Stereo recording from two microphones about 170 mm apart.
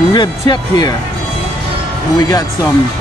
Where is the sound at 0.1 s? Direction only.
25° left (ahead or behind).